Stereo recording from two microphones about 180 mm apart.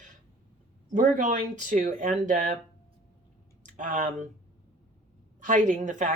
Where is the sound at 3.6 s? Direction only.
45° right (ahead or behind).